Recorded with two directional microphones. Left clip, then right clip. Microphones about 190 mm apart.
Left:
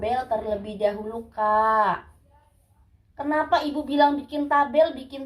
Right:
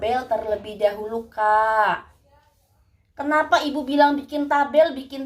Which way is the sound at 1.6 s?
45° right (ahead or behind).